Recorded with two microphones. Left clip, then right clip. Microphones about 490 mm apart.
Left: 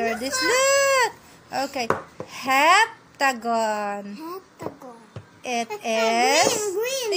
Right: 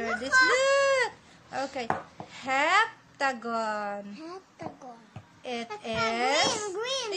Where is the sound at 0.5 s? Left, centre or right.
Right.